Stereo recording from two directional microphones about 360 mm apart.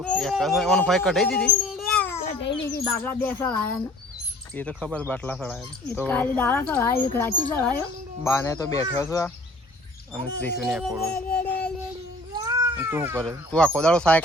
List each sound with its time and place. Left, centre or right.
0.0 s a man's voice: centre
2.1 s a child's voice: left
2.8 s speech: centre
10.6 s speech: centre
12.3 s speech: centre